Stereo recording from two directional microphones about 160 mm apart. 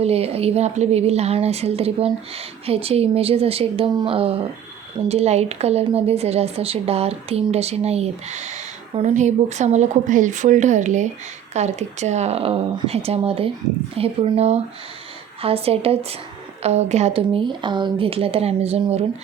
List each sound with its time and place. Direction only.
0.0 s speech: 40° right (ahead or behind)